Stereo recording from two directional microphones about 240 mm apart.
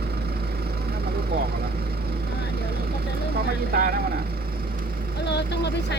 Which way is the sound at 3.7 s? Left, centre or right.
Right.